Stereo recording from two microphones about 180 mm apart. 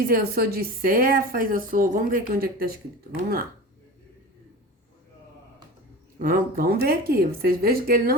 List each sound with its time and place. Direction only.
0.1 s a woman's voice: 55° right (ahead or behind)
6.1 s speech: 50° right (ahead or behind)